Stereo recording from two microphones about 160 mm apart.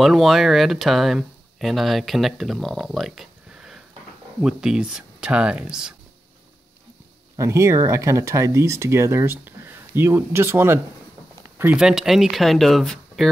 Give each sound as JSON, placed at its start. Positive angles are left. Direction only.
{"t": 0.0, "sound": "speech", "side_deg": 0}
{"t": 7.3, "sound": "speech", "side_deg": -20}